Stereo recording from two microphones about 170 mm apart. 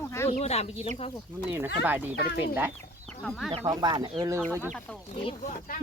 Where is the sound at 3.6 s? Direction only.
25° right (ahead or behind).